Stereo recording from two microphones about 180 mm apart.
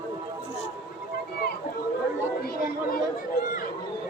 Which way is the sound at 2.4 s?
55° left (ahead or behind).